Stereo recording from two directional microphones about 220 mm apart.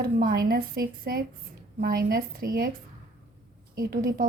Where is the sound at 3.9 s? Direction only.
40° right (ahead or behind).